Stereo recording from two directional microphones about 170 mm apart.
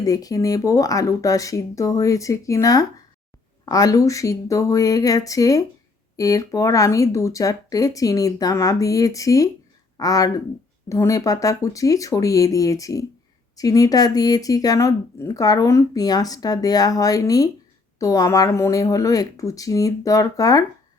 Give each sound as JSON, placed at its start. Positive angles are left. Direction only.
{"t": 0.0, "sound": "speech", "side_deg": 20}